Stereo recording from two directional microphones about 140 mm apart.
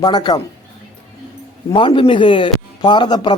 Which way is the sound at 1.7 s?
35° left (ahead or behind).